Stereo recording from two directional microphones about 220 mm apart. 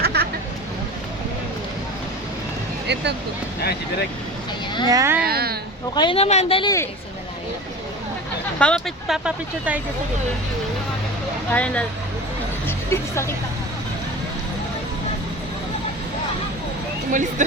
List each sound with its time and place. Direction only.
0.0 s a sound: 45° right (ahead or behind)
2.8 s a woman's voice: 50° right (ahead or behind)
4.9 s speech: 15° right (ahead or behind)
5.2 s a woman's voice: 45° right (ahead or behind)
5.9 s speech: 20° left (ahead or behind)
8.5 s speech: 5° left (ahead or behind)
11.5 s speech: 5° left (ahead or behind)
17.1 s speech: 35° right (ahead or behind)